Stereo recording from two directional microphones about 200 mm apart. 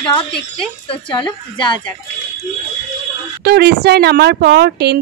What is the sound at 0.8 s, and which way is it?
Speech, 25° left (ahead or behind).